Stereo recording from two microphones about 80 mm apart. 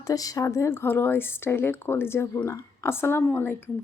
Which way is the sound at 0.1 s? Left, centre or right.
Left.